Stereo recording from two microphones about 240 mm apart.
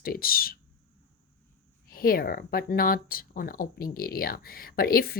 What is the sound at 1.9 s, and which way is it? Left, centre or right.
Speech, left.